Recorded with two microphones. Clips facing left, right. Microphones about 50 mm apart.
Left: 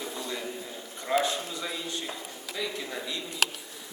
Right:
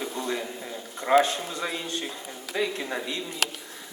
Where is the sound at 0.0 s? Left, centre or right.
Right.